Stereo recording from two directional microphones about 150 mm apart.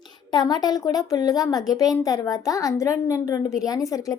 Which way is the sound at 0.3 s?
25° left (ahead or behind).